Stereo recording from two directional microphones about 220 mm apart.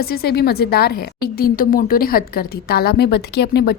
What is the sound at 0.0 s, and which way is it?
A woman's voice, 45° left (ahead or behind).